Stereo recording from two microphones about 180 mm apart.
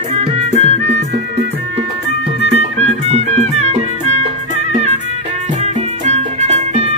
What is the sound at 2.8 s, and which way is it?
Music, 35° right (ahead or behind).